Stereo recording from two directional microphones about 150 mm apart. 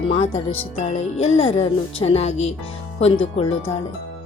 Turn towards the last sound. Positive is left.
turn(degrees=40)  # may be behind; listen again after turning